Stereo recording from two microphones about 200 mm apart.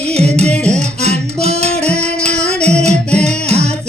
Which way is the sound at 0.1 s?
30° right (ahead or behind).